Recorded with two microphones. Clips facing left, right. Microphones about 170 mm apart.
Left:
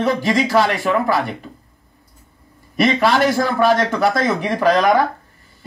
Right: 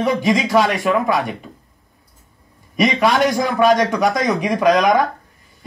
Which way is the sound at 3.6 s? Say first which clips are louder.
Right 3 dB; 15° right (ahead or behind).